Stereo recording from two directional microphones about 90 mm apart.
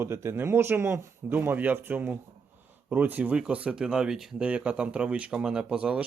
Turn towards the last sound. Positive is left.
turn(degrees=-10)  # may be behind; listen again after turning